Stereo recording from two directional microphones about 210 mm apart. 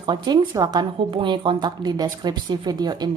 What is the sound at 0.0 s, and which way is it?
A woman's voice, 20° right (ahead or behind).